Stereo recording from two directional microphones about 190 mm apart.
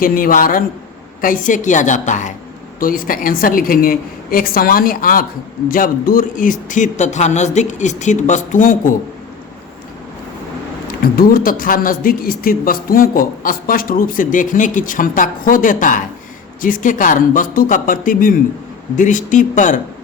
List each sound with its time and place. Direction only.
0.0 s speech: 50° left (ahead or behind)
11.0 s speech: 50° left (ahead or behind)